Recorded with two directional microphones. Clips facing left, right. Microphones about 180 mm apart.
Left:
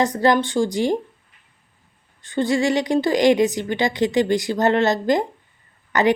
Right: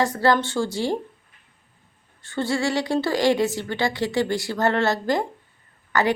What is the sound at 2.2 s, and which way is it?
A woman's voice, 15° left (ahead or behind).